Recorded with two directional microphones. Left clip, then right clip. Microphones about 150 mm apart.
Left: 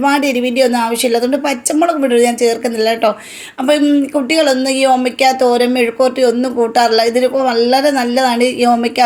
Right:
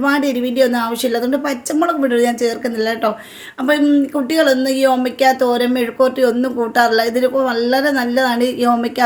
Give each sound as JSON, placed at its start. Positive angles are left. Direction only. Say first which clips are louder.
{"t": 0.0, "sound": "speech", "louder": "left 3 dB", "side_deg": 15}